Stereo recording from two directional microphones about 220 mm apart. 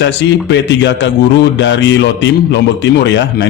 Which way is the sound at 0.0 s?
55° left (ahead or behind).